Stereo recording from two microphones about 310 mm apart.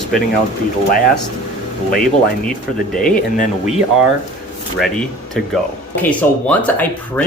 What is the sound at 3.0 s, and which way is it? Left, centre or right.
Speech, left.